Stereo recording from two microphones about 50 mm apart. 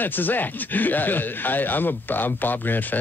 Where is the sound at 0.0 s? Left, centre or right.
Left.